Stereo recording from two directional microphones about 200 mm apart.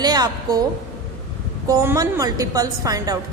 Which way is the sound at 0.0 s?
20° right (ahead or behind).